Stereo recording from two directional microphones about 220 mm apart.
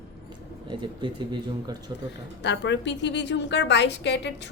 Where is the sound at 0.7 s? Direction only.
20° right (ahead or behind).